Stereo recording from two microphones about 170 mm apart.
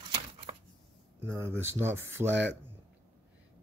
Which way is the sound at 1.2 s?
15° right (ahead or behind).